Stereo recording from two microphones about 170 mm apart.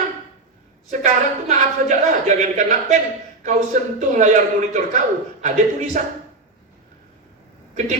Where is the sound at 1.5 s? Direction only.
45° right (ahead or behind).